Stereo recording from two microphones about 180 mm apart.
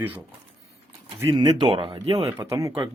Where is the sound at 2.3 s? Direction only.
20° right (ahead or behind).